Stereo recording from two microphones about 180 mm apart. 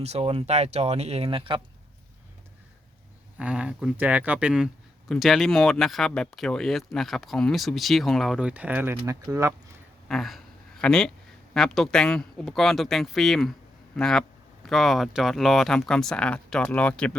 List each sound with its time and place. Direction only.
0.0 s speech: 35° right (ahead or behind)
3.3 s speech: 5° right (ahead or behind)
10.1 s a sound: centre (ahead or behind)
11.5 s speech: centre (ahead or behind)